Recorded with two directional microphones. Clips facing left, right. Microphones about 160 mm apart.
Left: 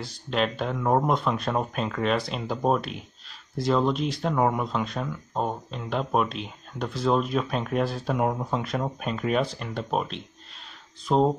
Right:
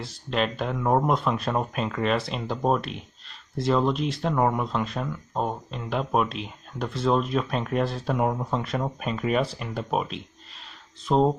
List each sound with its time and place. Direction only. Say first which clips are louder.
0.0 s speech: even; centre (ahead or behind)